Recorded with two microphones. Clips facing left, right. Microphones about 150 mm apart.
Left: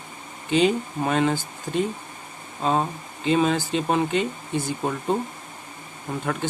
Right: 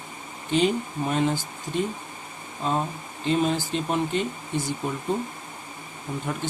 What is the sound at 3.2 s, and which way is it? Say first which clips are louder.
Speech: left 3 dB; 90° left.